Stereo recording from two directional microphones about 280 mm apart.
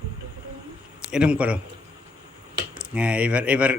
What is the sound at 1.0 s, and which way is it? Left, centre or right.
Speech, centre.